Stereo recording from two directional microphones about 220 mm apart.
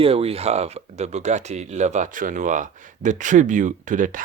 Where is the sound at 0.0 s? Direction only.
25° right (ahead or behind).